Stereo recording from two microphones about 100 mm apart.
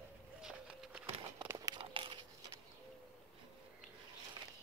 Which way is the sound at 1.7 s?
55° right (ahead or behind).